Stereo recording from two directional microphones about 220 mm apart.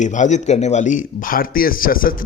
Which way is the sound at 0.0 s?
35° left (ahead or behind).